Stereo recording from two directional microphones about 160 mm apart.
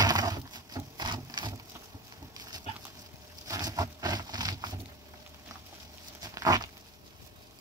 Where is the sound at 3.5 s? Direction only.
20° right (ahead or behind).